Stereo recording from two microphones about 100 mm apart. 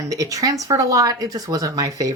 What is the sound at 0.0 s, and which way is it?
Speech, 35° right (ahead or behind).